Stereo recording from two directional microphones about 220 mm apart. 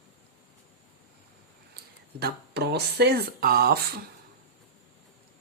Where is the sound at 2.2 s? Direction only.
50° right (ahead or behind).